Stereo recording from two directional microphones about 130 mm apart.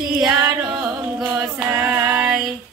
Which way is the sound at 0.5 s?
10° right (ahead or behind).